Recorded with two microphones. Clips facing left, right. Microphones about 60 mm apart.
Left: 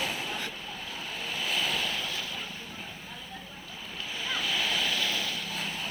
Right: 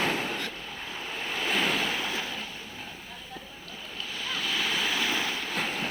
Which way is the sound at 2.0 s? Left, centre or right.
Right.